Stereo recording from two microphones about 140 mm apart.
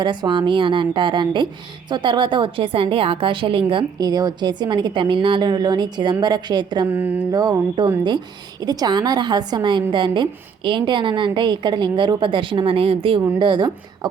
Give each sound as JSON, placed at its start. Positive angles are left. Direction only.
{"t": 0.0, "sound": "a woman's voice", "side_deg": -35}
{"t": 6.9, "sound": "mantra", "side_deg": -15}
{"t": 7.3, "sound": "a woman's voice", "side_deg": -25}